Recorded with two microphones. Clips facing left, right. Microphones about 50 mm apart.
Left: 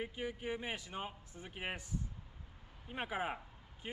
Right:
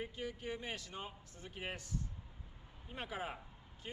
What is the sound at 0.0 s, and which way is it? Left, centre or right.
Speech, centre.